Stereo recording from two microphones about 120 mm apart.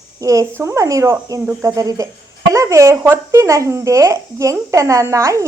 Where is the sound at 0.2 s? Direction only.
30° right (ahead or behind).